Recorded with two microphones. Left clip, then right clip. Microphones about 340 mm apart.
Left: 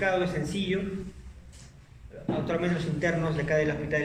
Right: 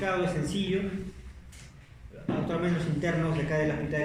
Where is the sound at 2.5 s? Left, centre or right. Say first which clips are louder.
Left 2 dB; left.